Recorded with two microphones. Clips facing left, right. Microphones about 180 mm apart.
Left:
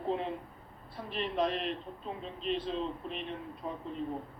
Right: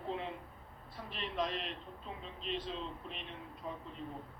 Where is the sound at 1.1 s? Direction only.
55° left (ahead or behind).